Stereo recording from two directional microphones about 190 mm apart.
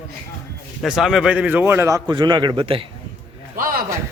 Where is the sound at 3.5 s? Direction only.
50° right (ahead or behind).